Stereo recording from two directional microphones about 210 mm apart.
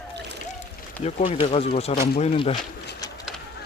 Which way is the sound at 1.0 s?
30° left (ahead or behind).